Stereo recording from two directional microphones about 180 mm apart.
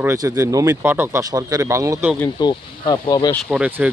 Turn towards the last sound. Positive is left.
turn(degrees=-5)  # may be behind; listen again after turning